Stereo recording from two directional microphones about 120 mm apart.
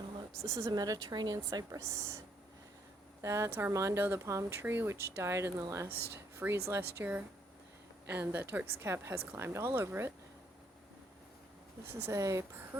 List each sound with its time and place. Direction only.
0.4 s a woman's voice: 25° right (ahead or behind)
12.0 s speech: 25° right (ahead or behind)